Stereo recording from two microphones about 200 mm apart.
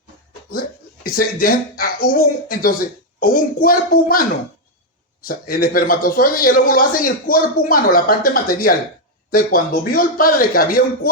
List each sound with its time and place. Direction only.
1.0 s a man's voice: 45° left (ahead or behind)
5.3 s a man's voice: 45° left (ahead or behind)